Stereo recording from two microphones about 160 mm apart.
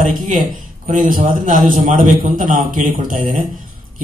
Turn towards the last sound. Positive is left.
turn(degrees=-55)  # may be behind; listen again after turning